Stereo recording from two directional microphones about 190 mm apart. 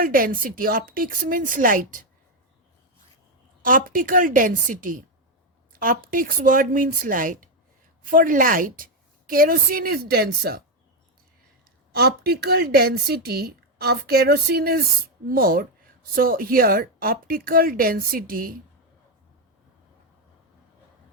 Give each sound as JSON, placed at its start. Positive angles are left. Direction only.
{"t": 0.0, "sound": "a woman's voice", "side_deg": -50}
{"t": 3.6, "sound": "a woman's voice", "side_deg": -45}
{"t": 11.9, "sound": "a woman's voice", "side_deg": -55}